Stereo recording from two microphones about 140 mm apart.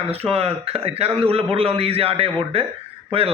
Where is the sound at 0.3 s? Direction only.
45° right (ahead or behind).